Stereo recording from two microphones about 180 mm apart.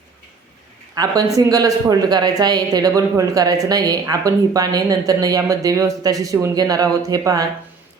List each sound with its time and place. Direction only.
0.9 s speech: 20° right (ahead or behind)